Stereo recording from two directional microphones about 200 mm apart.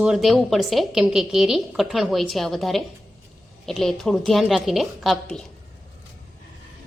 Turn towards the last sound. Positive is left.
turn(degrees=0)  # may be behind; listen again after turning